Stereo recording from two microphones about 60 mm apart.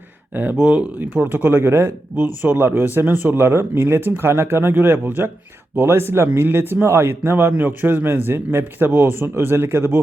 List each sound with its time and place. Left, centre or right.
0.5 s speech: centre
0.9 s speech: right
1.5 s speech: right